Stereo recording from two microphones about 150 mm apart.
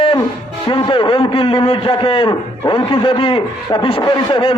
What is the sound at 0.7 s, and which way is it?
A man's voice, 35° left (ahead or behind).